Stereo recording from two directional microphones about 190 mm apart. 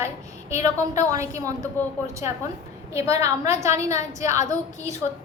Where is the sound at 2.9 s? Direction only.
15° right (ahead or behind).